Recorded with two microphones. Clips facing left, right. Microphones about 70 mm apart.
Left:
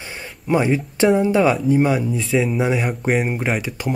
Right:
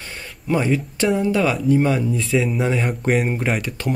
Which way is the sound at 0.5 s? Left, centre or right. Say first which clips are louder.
Left 2 dB; centre.